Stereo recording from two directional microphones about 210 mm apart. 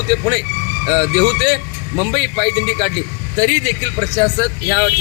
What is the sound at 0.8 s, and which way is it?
A man's voice, 15° right (ahead or behind).